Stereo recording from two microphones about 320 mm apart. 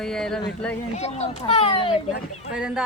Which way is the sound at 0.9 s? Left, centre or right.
Centre.